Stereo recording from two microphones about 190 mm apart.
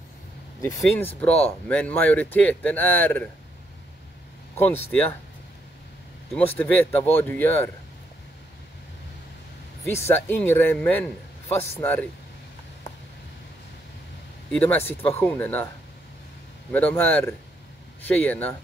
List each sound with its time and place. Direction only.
0.6 s a man's voice: 15° left (ahead or behind)
4.8 s a man's voice: 10° left (ahead or behind)
6.3 s a man's voice: 10° left (ahead or behind)
9.8 s a man's voice: 10° left (ahead or behind)
14.5 s a man's voice: 5° left (ahead or behind)
14.8 s speech: 30° left (ahead or behind)
15.1 s a man's voice: 10° left (ahead or behind)
16.7 s a man's voice: 10° left (ahead or behind)